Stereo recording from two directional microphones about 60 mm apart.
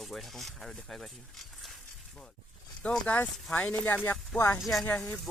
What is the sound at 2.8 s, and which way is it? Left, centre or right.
Speech, centre.